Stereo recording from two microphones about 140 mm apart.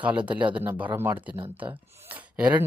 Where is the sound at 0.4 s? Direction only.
15° right (ahead or behind).